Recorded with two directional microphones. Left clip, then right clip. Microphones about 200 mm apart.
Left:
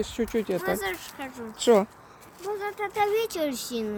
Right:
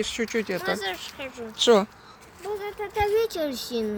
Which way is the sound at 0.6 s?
60° left (ahead or behind).